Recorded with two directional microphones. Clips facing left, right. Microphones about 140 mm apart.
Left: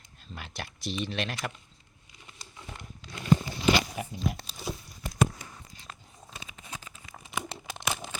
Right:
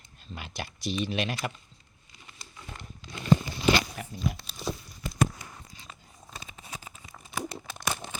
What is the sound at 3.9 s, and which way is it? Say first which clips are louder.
Speech: left 3 dB; 15° left (ahead or behind).